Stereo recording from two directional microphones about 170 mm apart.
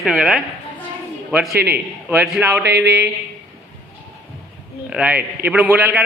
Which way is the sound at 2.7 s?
80° right.